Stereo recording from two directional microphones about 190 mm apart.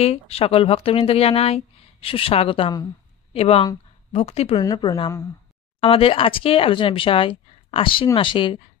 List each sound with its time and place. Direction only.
0.0 s speech: 30° left (ahead or behind)
4.6 s speech: 20° left (ahead or behind)